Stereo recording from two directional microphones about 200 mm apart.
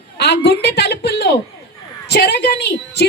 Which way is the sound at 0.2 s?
55° left (ahead or behind).